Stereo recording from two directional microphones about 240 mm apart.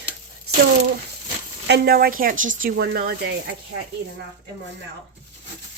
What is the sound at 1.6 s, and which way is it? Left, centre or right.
Speech, right.